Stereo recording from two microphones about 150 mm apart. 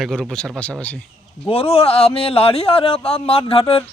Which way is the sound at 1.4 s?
40° left (ahead or behind).